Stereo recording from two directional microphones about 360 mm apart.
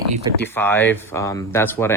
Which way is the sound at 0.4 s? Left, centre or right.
Centre.